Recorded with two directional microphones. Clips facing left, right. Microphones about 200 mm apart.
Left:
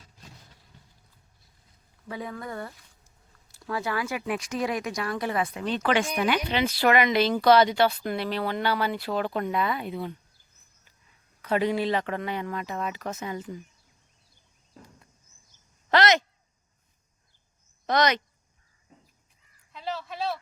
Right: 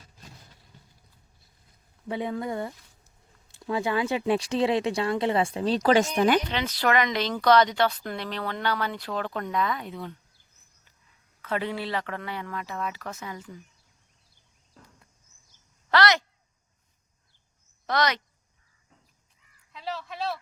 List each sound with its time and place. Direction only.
2.0 s speech: 25° right (ahead or behind); by 6.4 s 45° right (ahead or behind)
6.5 s speech: 10° left (ahead or behind)
11.4 s speech: 15° left (ahead or behind)
15.9 s speech: 20° left (ahead or behind)
17.8 s speech: 20° left (ahead or behind)
19.7 s a sound: centre (ahead or behind)